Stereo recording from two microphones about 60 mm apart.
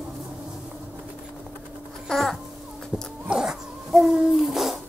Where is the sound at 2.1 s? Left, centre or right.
Centre.